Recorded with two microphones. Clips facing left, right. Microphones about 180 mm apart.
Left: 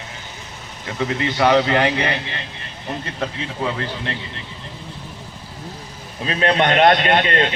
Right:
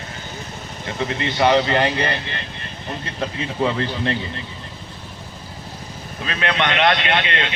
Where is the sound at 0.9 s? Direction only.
5° left (ahead or behind).